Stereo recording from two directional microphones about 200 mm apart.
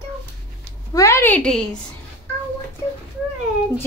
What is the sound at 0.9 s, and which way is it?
Speech, 15° left (ahead or behind).